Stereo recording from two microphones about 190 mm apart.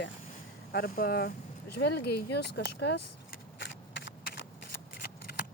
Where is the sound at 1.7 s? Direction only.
60° left (ahead or behind).